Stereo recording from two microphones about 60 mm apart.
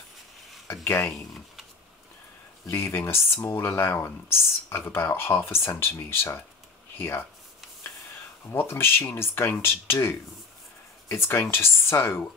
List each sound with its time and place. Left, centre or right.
0.8 s speech: left
2.7 s speech: left
8.5 s speech: left
11.1 s speech: left